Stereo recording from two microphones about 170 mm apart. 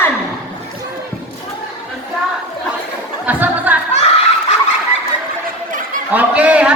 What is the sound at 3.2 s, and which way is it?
Music, 10° right (ahead or behind).